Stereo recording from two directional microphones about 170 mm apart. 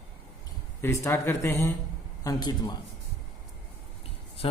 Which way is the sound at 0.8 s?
15° left (ahead or behind).